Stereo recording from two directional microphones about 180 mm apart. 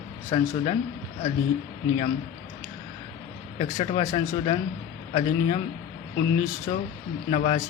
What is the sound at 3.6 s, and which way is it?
Speech, 30° left (ahead or behind).